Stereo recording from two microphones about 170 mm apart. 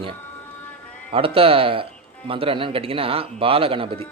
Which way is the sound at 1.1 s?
35° right (ahead or behind).